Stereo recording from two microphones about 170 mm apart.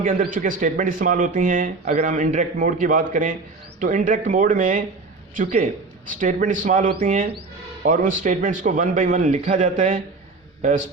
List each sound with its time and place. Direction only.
0.0 s a man's voice: 50° right (ahead or behind)